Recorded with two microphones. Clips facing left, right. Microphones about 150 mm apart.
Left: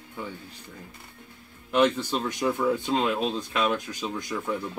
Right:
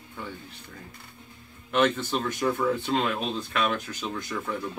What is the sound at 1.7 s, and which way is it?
Speech, 15° left (ahead or behind).